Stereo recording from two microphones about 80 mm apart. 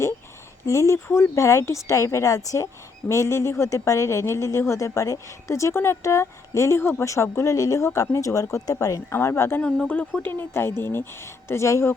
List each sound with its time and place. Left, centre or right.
0.6 s a woman's voice: left
9.6 s a woman's voice: centre; by 11.9 s left